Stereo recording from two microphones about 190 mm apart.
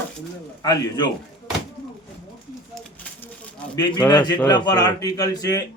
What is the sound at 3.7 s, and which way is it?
A man's voice, 20° left (ahead or behind).